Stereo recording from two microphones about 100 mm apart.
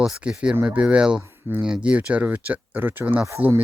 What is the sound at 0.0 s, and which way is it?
Speech, 10° right (ahead or behind).